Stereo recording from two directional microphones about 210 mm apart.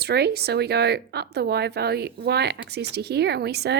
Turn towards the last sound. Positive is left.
turn(degrees=-50)  # may be behind; listen again after turning